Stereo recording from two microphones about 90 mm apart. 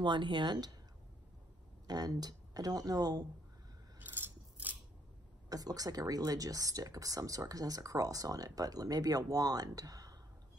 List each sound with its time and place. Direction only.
0.0 s speech: 60° right (ahead or behind)
1.9 s speech: 45° right (ahead or behind)
4.0 s coin: 20° right (ahead or behind)
5.5 s speech: 45° right (ahead or behind)